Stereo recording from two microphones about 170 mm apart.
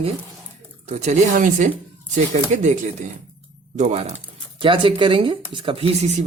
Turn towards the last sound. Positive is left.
turn(degrees=-35)  # may be behind; listen again after turning